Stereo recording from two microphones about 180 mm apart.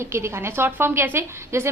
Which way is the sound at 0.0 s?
15° right (ahead or behind).